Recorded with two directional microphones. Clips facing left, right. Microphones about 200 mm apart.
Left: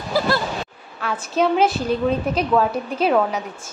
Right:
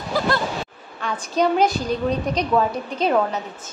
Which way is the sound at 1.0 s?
5° left (ahead or behind).